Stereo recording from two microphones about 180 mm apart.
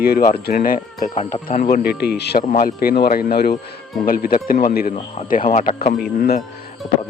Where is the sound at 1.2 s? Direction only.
35° left (ahead or behind).